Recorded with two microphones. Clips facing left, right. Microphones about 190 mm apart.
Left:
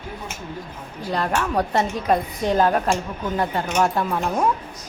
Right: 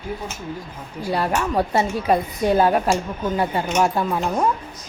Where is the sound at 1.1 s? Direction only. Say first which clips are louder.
Right 1 dB; 10° right (ahead or behind).